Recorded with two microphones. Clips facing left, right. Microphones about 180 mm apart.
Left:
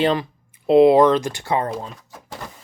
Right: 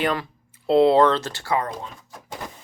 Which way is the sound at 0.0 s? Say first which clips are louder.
Left 5 dB; 20° left (ahead or behind).